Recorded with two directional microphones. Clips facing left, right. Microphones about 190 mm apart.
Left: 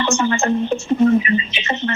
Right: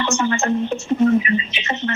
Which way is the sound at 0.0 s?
30° left (ahead or behind).